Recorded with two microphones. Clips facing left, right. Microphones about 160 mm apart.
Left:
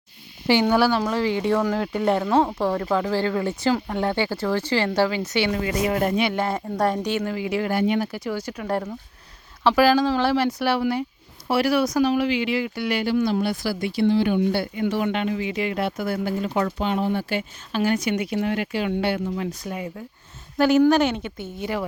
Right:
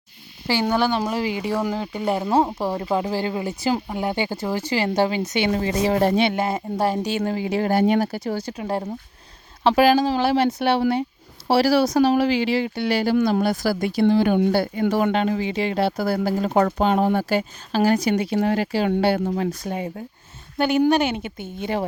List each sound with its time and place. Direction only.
0.9 s speech: 20° right (ahead or behind)
5.5 s speech: 30° right (ahead or behind)
6.3 s speech: 20° right (ahead or behind)
7.0 s speech: 30° right (ahead or behind)
13.1 s speech: 60° right (ahead or behind)
13.4 s speech: 45° right (ahead or behind)
20.6 s a woman's voice: centre (ahead or behind)
21.6 s speech: 25° right (ahead or behind)